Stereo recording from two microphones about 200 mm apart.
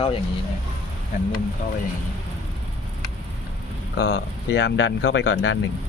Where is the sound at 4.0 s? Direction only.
55° left (ahead or behind).